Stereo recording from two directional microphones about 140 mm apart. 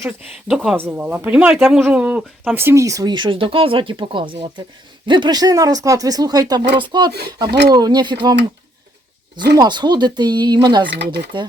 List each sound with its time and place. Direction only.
0.4 s speech: 5° right (ahead or behind)
1.8 s speech: 10° right (ahead or behind); by 8.4 s 35° right (ahead or behind)
9.4 s speech: 30° right (ahead or behind)